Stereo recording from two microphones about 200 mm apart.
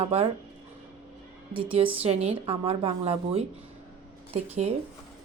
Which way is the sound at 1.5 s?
30° right (ahead or behind).